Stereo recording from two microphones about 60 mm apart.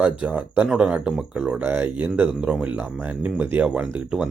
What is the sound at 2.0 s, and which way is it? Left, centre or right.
Speech, right.